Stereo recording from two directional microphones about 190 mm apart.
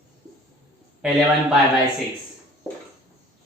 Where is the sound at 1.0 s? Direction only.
5° right (ahead or behind).